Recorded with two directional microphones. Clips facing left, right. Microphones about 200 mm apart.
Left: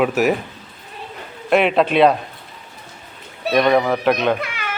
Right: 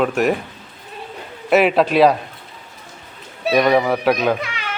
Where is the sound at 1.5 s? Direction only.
5° right (ahead or behind).